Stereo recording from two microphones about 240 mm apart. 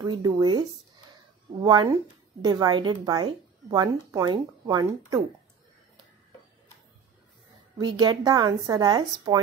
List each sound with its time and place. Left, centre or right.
0.0 s speech: centre
7.7 s speech: centre